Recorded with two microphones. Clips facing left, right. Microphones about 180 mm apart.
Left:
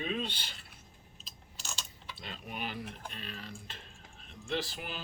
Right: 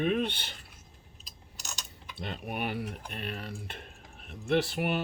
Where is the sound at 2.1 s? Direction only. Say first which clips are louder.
Right 7 dB; 60° right (ahead or behind).